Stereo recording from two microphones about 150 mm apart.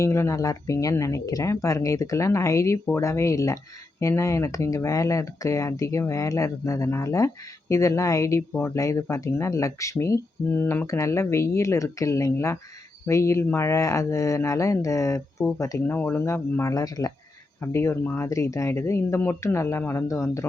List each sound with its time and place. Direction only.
0.0 s speech: 20° left (ahead or behind)